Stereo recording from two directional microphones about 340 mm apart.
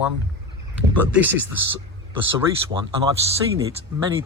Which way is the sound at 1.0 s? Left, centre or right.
Centre.